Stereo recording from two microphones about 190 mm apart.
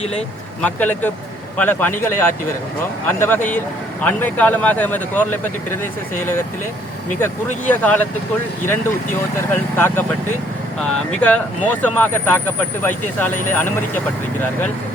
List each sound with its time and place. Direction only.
0.0 s speech: 35° left (ahead or behind)
0.6 s speech: 10° left (ahead or behind)
7.7 s speech: 10° left (ahead or behind)
9.5 s speech: 10° left (ahead or behind)